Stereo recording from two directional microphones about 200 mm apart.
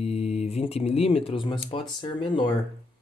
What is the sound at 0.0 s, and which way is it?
Speech, 30° left (ahead or behind).